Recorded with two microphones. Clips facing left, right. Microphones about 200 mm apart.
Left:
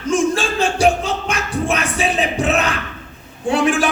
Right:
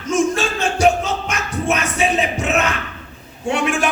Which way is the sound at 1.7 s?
30° left (ahead or behind).